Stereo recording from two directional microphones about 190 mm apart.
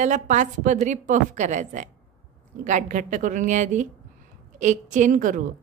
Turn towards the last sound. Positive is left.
turn(degrees=-45)  # may be behind; listen again after turning